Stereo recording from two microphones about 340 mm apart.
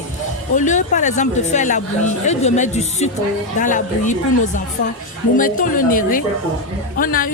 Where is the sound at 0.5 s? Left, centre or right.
Left.